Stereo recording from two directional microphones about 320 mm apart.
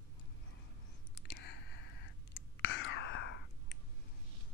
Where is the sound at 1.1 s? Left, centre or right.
Left.